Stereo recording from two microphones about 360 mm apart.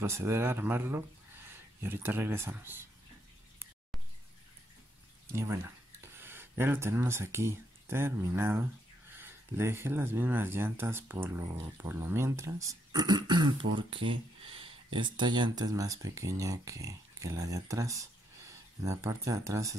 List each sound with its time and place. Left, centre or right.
0.0 s speech: centre
5.3 s speech: centre